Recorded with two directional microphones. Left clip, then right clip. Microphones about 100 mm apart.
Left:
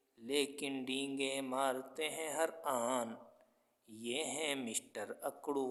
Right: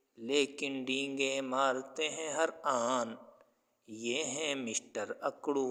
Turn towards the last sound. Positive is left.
turn(degrees=-20)  # may be behind; listen again after turning